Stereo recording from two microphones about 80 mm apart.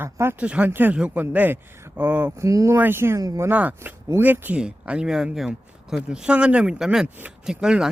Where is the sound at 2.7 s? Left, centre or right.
Right.